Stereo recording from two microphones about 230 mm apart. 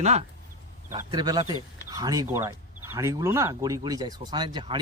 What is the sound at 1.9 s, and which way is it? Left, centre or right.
Speech, centre.